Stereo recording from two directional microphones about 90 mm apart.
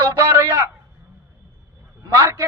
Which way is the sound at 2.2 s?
35° right (ahead or behind).